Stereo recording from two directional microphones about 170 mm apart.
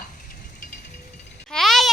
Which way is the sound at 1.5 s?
Centre (ahead or behind).